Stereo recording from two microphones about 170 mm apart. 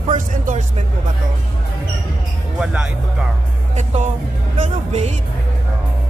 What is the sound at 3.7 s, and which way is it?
Music, 45° right (ahead or behind).